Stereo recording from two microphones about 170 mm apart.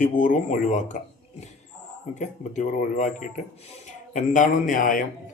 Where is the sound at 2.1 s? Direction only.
45° left (ahead or behind).